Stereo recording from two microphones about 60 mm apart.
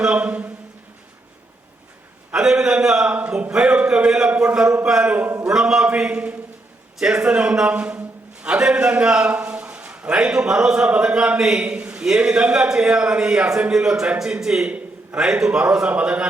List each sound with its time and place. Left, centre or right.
0.0 s speech: right
2.3 s a man's voice: centre
3.1 s a man's voice: right
5.4 s a man's voice: centre